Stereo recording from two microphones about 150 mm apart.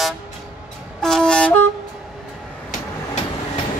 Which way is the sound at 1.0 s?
5° left (ahead or behind).